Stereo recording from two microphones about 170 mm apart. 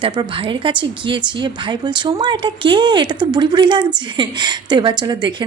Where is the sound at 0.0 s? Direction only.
25° right (ahead or behind).